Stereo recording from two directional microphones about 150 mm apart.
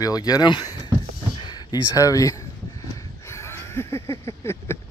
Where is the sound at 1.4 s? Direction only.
25° left (ahead or behind).